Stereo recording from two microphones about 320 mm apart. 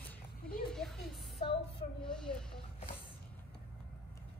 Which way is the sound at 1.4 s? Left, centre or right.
Centre.